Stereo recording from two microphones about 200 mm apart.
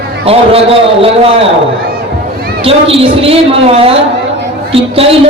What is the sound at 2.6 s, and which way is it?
A woman's voice, 30° right (ahead or behind).